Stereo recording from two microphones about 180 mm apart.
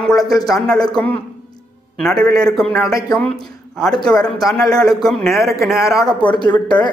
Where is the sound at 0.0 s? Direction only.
Centre (ahead or behind).